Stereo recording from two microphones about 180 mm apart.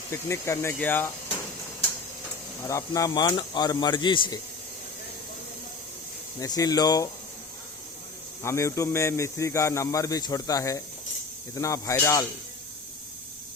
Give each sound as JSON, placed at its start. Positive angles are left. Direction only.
{"t": 0.1, "sound": "speech", "side_deg": 15}
{"t": 2.6, "sound": "speech", "side_deg": 20}
{"t": 6.4, "sound": "speech", "side_deg": 20}
{"t": 8.4, "sound": "speech", "side_deg": 15}